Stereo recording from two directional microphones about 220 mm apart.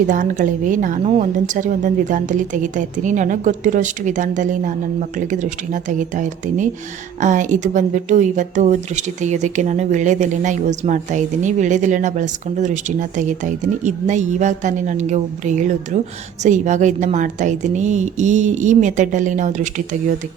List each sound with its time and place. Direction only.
0.1 s a woman's voice: 35° right (ahead or behind)